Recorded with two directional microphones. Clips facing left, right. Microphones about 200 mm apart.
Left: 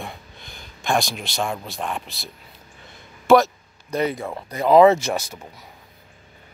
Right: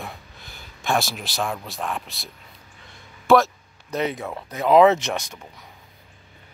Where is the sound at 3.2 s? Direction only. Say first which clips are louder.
Left 2 dB; centre (ahead or behind).